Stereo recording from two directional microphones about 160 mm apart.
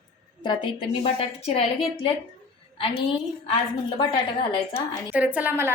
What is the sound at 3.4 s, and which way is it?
Speech, 30° left (ahead or behind).